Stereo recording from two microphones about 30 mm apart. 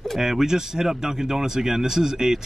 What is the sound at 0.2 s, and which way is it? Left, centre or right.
Speech, centre.